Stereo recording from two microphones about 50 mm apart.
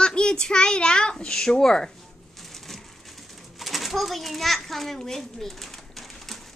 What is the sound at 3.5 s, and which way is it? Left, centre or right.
Pigeon, centre.